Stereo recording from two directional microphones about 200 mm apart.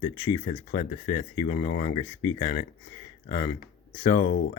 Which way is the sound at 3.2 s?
45° left (ahead or behind).